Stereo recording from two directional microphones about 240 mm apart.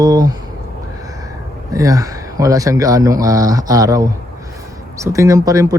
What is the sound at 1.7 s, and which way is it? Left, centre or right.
Speech, centre.